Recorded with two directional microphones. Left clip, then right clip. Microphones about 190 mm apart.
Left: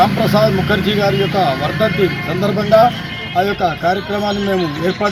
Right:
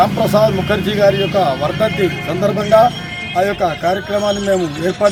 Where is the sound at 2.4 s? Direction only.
20° right (ahead or behind).